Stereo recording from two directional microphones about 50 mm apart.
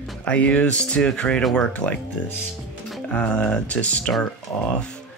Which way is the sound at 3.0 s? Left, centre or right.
Centre.